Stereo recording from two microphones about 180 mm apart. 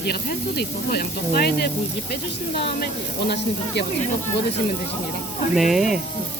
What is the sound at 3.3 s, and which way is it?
Speech, 65° left (ahead or behind).